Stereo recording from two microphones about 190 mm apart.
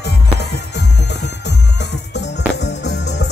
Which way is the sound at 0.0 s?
60° left (ahead or behind).